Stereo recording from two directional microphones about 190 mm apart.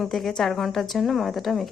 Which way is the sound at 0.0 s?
Centre (ahead or behind).